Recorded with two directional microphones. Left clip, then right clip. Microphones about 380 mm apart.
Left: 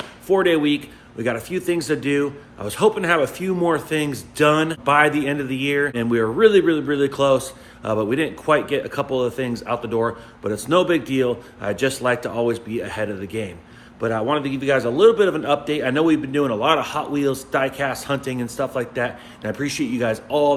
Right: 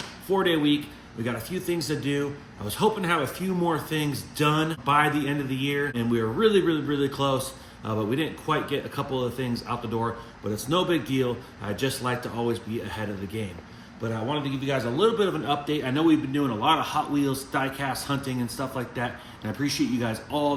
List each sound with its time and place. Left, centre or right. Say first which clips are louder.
0.3 s a man's voice: left 5 dB; centre